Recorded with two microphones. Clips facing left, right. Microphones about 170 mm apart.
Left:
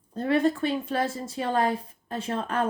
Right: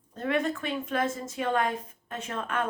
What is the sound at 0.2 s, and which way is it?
A woman's voice, 35° left (ahead or behind).